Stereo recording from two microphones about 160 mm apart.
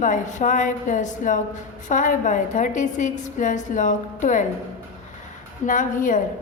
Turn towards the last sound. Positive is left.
turn(degrees=55)  # may be behind; listen again after turning